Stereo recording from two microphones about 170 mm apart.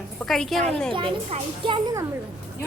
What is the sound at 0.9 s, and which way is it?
Speech, 30° right (ahead or behind).